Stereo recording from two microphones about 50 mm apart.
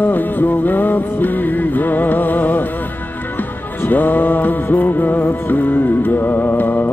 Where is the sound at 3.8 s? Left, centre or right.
Left.